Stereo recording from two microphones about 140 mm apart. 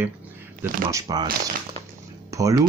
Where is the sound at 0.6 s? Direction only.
25° right (ahead or behind).